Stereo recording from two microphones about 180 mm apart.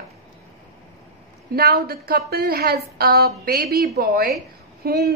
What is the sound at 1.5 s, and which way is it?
A woman's voice, 60° right (ahead or behind).